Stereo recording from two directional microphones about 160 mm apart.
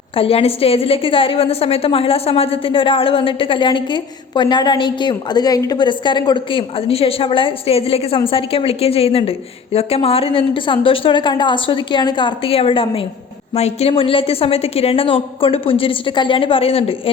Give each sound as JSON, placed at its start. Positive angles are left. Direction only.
{"t": 0.2, "sound": "a woman's voice", "side_deg": 40}